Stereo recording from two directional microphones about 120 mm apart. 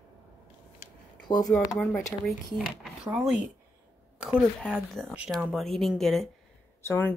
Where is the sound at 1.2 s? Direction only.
35° left (ahead or behind).